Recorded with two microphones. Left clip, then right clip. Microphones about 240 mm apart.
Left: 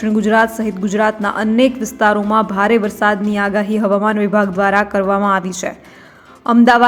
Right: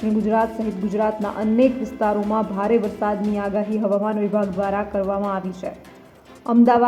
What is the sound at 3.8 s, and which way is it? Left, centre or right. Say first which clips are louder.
Speech: left 7 dB; left.